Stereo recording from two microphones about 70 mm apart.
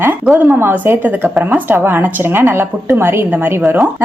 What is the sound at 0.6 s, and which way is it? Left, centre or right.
A woman's voice, right.